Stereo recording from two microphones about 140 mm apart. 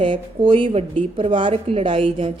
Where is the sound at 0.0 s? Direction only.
35° right (ahead or behind).